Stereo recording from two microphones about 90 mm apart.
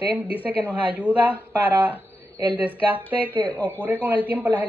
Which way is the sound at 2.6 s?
20° right (ahead or behind).